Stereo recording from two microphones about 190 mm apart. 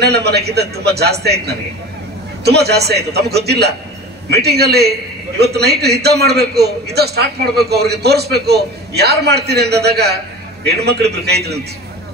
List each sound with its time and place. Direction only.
0.0 s a man's voice: 60° right (ahead or behind)